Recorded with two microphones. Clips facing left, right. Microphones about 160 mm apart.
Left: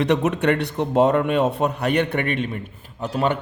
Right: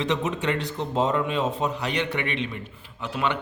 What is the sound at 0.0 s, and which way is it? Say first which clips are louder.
A man's voice: left 6 dB; 65° left (ahead or behind).